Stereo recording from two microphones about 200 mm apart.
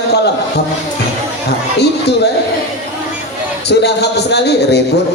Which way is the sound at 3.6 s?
55° left (ahead or behind).